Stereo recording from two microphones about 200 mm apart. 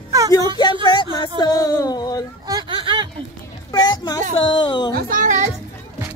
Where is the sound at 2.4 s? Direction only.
20° right (ahead or behind).